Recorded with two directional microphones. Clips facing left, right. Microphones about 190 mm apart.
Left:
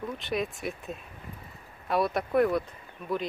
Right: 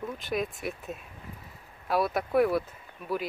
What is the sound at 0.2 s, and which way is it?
Speech, centre (ahead or behind).